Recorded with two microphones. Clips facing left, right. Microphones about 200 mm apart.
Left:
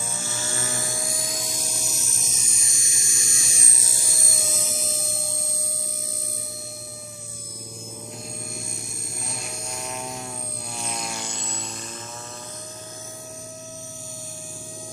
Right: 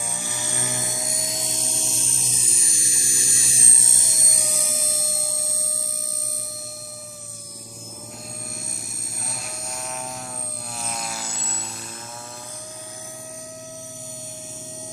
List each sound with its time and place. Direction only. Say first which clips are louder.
0.0 s helicopter: even; 15° right (ahead or behind)
9.2 s vehicle: even; centre (ahead or behind)
10.8 s a sound: even; centre (ahead or behind)